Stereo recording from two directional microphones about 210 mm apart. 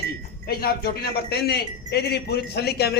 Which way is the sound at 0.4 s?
50° left (ahead or behind).